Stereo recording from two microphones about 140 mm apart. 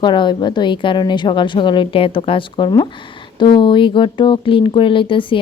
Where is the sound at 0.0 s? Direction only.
35° left (ahead or behind).